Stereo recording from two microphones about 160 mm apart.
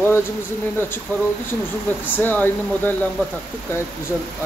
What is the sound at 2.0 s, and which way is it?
Speech, 10° left (ahead or behind).